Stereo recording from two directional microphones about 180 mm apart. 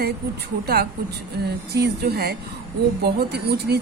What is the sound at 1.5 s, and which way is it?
Speech, 60° right (ahead or behind).